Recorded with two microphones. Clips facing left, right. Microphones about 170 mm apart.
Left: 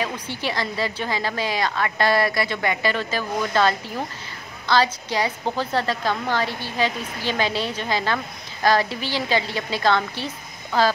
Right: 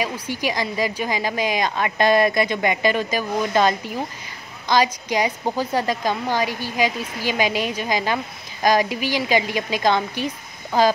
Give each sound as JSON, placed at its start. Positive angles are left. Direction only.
{"t": 0.0, "sound": "a woman's voice", "side_deg": -10}